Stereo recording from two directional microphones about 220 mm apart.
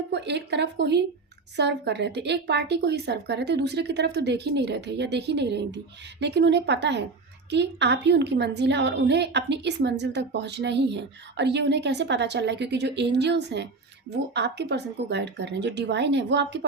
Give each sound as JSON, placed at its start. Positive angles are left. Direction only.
{"t": 0.1, "sound": "a woman's voice", "side_deg": -50}